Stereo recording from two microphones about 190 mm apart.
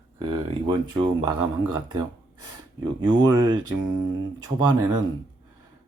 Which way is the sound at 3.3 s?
25° right (ahead or behind).